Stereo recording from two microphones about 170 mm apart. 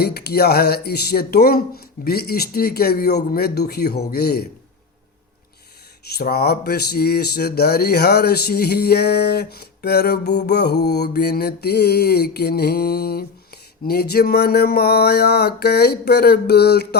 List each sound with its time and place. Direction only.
0.0 s speech: 70° left (ahead or behind)
6.1 s speech: 65° left (ahead or behind)